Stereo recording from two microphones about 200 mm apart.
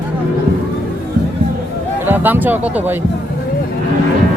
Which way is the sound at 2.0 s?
10° right (ahead or behind).